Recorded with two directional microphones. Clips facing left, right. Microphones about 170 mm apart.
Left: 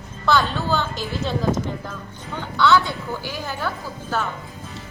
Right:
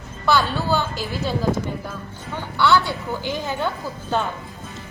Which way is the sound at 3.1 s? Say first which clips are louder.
Right 3 dB; 20° right (ahead or behind).